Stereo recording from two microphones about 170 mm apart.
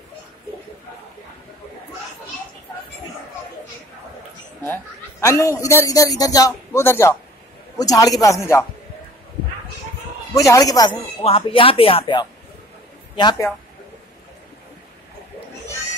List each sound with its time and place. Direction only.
5.2 s a man's voice: 15° left (ahead or behind)
10.3 s a man's voice: 20° left (ahead or behind)
11.2 s a man's voice: 30° left (ahead or behind)